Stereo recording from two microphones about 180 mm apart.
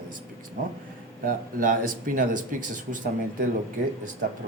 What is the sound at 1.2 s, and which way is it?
Speech, 50° right (ahead or behind).